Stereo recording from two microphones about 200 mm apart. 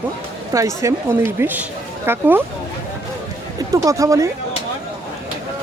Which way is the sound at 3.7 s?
15° right (ahead or behind).